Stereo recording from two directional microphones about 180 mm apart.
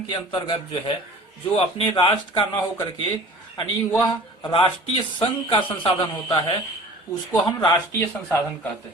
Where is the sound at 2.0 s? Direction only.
30° left (ahead or behind).